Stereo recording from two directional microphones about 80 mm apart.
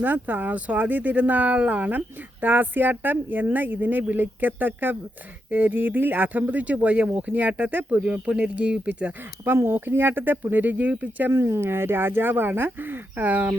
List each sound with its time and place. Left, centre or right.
0.0 s speech: right
9.4 s speech: right
11.3 s speech: right